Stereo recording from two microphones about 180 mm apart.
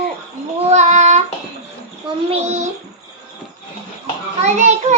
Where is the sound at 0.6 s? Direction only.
40° right (ahead or behind).